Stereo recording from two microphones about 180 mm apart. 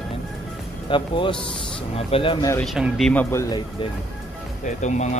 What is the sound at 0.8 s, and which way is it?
Speech, 25° left (ahead or behind).